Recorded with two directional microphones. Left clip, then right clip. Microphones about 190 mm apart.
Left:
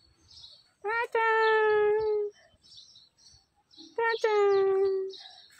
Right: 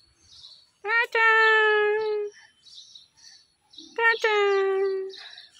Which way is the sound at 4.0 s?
Centre (ahead or behind).